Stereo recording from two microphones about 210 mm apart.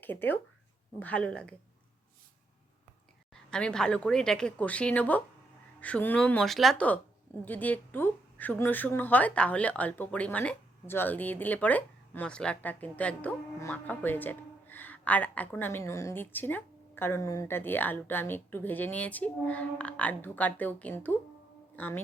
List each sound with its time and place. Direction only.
0.0 s a woman's voice: 10° left (ahead or behind)
3.5 s a woman's voice: 5° left (ahead or behind)